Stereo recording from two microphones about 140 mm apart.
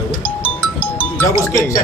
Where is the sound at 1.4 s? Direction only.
25° left (ahead or behind).